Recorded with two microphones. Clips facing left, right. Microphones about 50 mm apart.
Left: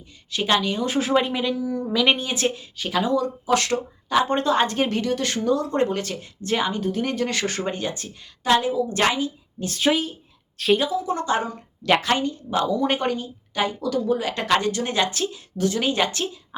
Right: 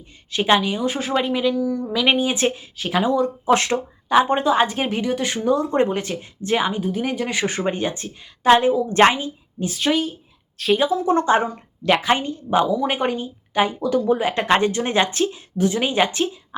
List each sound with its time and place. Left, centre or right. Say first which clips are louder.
0.3 s speech: right 4 dB; right; by 2.1 s centre
2.1 s speech: right 5 dB; right
4.3 s speech: right 3 dB; centre; by 9.6 s right
9.6 s speech: right 1 dB; centre
10.8 s speech: right 6 dB; right
12.6 s speech: right 1 dB; centre